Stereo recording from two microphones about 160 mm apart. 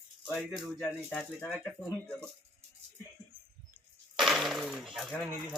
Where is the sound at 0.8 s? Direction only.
10° left (ahead or behind).